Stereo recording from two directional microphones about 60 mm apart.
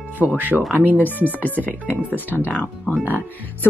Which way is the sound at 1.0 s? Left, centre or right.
Left.